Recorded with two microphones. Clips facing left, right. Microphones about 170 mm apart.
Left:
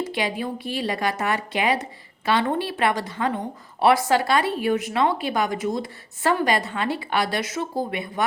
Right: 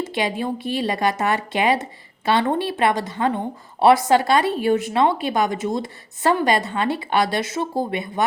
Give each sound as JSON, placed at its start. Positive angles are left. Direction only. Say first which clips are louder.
{"t": 0.0, "sound": "a woman's voice", "louder": "right 2 dB", "side_deg": -25}